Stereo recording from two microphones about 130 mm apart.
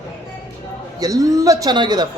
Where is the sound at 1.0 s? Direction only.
25° right (ahead or behind).